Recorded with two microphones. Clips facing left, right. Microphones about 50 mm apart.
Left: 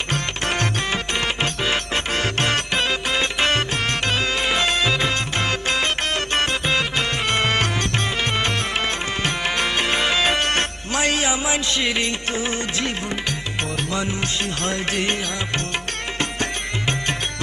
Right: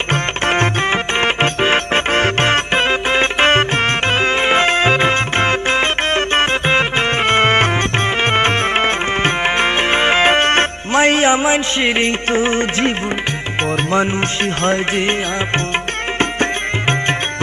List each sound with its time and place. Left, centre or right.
0.1 s music: right
13.9 s music: right